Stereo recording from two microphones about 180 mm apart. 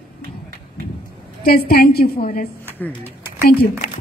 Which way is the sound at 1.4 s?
55° left (ahead or behind).